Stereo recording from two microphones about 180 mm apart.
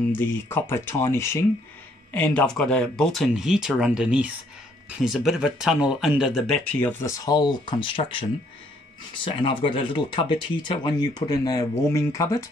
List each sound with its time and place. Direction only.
0.2 s speech: 10° left (ahead or behind)